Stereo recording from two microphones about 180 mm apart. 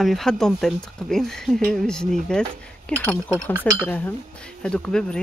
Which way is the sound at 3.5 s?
20° right (ahead or behind).